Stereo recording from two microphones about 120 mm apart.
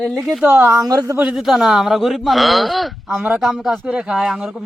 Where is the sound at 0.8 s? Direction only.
30° right (ahead or behind).